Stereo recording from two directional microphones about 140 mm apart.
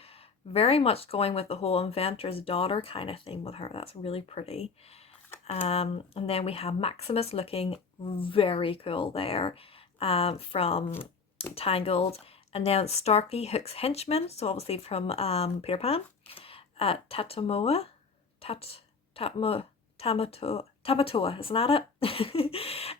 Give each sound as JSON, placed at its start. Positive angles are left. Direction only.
{"t": 0.0, "sound": "a woman's voice", "side_deg": 45}